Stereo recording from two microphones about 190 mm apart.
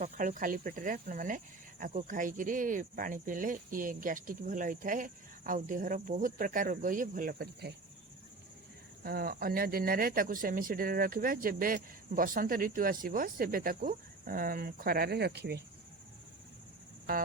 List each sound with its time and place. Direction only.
0.0 s speech: 45° right (ahead or behind)
9.0 s speech: 50° right (ahead or behind)